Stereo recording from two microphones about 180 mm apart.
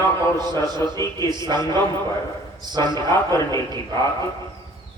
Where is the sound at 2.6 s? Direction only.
25° right (ahead or behind).